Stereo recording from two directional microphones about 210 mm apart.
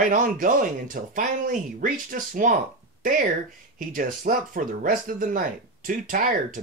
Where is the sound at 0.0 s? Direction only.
40° right (ahead or behind).